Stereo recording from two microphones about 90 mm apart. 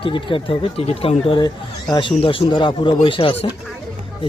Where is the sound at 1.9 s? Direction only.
65° left (ahead or behind).